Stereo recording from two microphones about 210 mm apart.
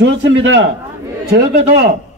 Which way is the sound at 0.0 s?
60° right (ahead or behind).